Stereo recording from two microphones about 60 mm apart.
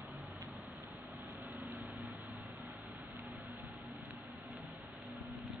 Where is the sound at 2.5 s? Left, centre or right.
Right.